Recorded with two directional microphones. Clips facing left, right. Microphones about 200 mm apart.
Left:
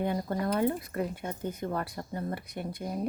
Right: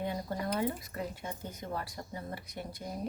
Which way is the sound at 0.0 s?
55° left (ahead or behind).